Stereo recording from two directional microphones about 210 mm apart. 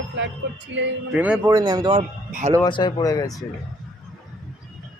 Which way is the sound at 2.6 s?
20° left (ahead or behind).